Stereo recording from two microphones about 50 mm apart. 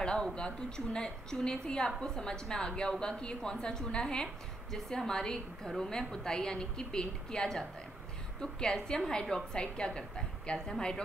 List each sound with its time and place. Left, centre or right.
0.0 s a woman's voice: centre